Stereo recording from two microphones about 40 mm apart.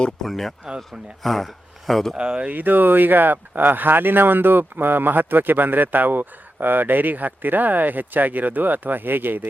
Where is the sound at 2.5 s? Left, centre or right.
Right.